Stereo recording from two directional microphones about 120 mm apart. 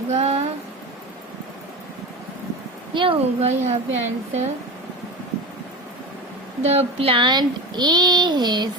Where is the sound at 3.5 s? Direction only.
75° right (ahead or behind).